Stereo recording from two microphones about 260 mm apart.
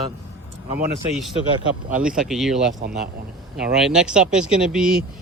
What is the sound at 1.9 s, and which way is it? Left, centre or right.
Speech, centre.